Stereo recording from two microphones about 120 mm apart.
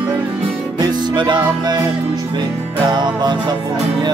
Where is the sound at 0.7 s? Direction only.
40° right (ahead or behind).